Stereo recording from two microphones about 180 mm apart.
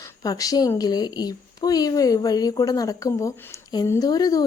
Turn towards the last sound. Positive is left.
turn(degrees=20)  # may be behind; listen again after turning